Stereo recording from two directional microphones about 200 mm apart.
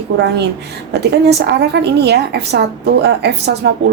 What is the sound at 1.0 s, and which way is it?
A woman's voice, 55° right (ahead or behind).